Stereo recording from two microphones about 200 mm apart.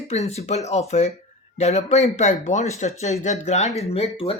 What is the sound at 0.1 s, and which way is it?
Speech, 35° left (ahead or behind).